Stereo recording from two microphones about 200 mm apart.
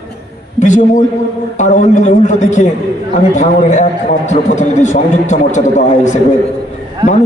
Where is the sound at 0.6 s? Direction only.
40° left (ahead or behind).